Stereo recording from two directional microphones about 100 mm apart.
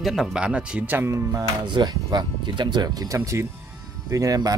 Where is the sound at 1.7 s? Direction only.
45° right (ahead or behind).